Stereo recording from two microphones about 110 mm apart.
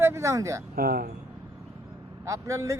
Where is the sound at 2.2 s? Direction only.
30° right (ahead or behind).